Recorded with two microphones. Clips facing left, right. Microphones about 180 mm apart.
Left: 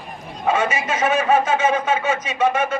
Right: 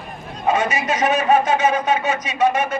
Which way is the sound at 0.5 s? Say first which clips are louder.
Right 1 dB; 40° right (ahead or behind).